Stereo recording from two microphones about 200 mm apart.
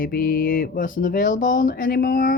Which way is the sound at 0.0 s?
45° left (ahead or behind).